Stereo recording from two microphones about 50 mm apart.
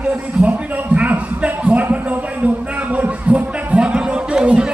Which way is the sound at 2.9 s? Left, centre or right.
Right.